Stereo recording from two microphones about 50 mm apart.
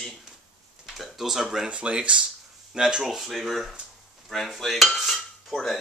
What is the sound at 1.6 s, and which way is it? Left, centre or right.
Speech, right.